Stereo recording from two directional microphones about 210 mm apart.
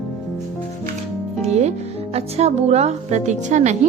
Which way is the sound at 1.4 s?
30° right (ahead or behind).